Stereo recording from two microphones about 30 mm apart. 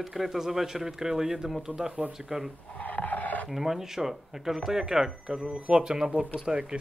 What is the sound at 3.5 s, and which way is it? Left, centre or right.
Speech, centre.